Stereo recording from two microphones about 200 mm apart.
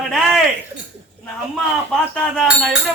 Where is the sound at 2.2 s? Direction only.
5° left (ahead or behind).